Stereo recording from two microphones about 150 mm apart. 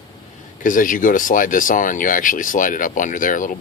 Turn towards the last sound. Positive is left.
turn(degrees=60)  # may be behind; listen again after turning